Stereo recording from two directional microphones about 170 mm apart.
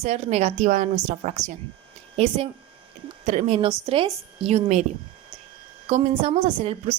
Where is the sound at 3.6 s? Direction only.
35° right (ahead or behind).